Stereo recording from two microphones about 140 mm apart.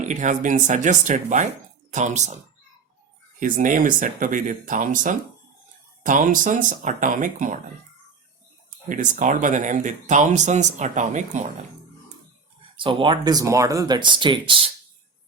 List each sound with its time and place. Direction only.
0.0 s speech: 60° right (ahead or behind)
3.4 s speech: 70° right (ahead or behind)
8.9 s speech: 65° right (ahead or behind)
12.7 s speech: 35° right (ahead or behind)